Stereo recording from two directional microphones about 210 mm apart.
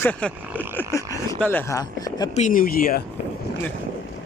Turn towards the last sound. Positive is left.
turn(degrees=45)  # may be behind; listen again after turning